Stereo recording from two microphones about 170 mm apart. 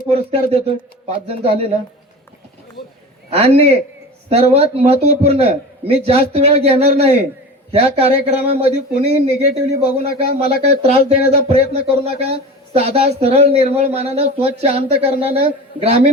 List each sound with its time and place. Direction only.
0.1 s speech: 35° right (ahead or behind)
3.3 s speech: 35° right (ahead or behind)